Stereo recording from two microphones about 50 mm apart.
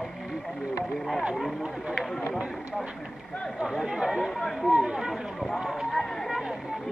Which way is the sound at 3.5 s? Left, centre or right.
Centre.